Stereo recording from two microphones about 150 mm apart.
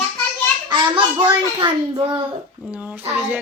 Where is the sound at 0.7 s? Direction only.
35° right (ahead or behind).